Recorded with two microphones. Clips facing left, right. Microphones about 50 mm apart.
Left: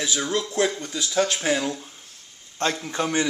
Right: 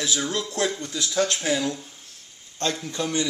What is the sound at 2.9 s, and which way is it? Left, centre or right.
Speech, left.